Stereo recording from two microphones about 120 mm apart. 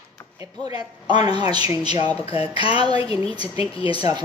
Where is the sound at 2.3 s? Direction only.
50° left (ahead or behind).